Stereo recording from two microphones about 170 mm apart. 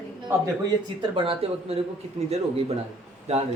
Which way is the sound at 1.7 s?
35° right (ahead or behind).